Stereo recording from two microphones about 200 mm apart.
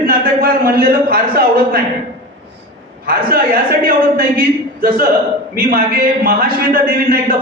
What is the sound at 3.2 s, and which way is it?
A man's voice, 45° right (ahead or behind).